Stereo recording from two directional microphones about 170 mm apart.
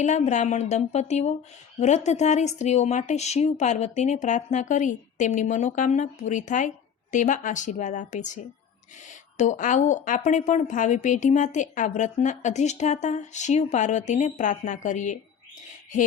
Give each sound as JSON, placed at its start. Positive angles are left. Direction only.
{"t": 0.0, "sound": "speech", "side_deg": 45}
{"t": 9.4, "sound": "speech", "side_deg": 45}